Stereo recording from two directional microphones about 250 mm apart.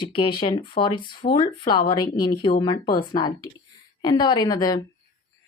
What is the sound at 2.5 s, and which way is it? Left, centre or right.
Speech, centre.